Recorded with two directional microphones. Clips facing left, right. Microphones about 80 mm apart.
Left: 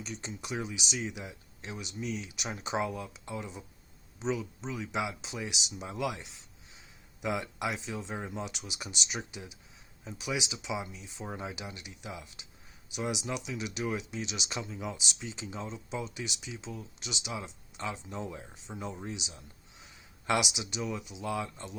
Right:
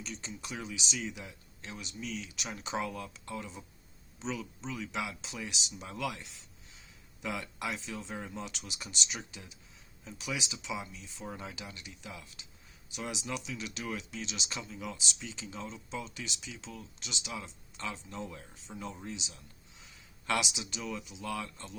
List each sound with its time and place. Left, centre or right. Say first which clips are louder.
0.0 s speech: left 2 dB; centre
11.3 s speech: left 4 dB; left
14.6 s speech: left 5 dB; left
14.9 s speech: left 2 dB; centre
16.0 s speech: left 3 dB; centre
21.2 s speech: left 3 dB; left